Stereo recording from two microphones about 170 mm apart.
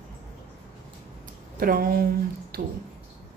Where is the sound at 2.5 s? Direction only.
65° right (ahead or behind).